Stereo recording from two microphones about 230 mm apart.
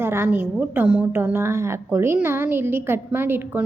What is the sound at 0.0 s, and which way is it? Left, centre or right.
A woman's voice, centre.